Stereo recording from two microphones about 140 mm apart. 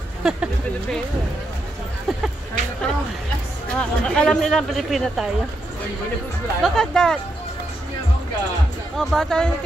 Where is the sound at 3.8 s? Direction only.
5° left (ahead or behind).